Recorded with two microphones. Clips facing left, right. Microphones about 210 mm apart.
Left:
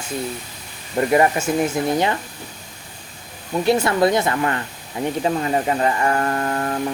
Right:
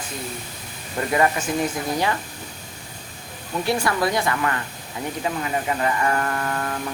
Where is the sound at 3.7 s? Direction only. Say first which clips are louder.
Left 6 dB; 25° left (ahead or behind).